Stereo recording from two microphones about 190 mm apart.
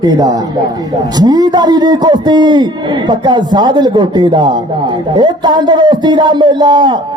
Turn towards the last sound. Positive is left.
turn(degrees=-25)  # may be behind; listen again after turning